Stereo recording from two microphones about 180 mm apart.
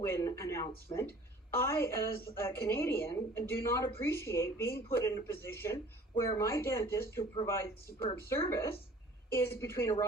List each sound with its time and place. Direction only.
0.0 s a woman's voice: 15° left (ahead or behind)